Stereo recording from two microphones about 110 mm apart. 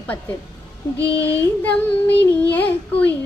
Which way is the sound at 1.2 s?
15° left (ahead or behind).